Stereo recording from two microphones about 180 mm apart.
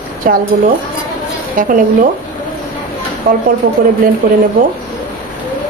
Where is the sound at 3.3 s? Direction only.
50° right (ahead or behind).